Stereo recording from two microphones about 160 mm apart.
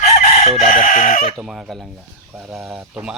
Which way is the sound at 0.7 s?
55° left (ahead or behind).